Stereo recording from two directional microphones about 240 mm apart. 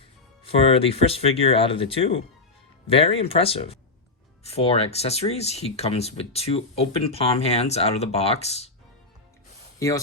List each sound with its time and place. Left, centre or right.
0.4 s speech: left
9.7 s speech: centre